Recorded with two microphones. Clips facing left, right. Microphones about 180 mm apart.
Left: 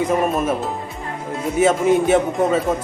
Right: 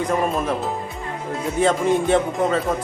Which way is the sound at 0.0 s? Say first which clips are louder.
Left 3 dB; 5° left (ahead or behind).